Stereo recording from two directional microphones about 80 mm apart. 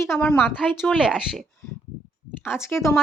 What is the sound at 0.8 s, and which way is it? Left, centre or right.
Speech, centre.